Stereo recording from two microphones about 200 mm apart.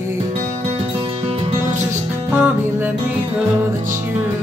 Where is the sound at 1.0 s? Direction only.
30° right (ahead or behind).